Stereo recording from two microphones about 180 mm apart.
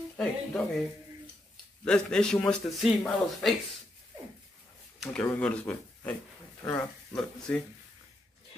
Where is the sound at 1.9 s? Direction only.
5° left (ahead or behind).